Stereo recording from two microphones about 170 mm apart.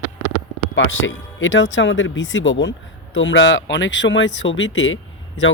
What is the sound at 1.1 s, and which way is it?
Speech, 90° left.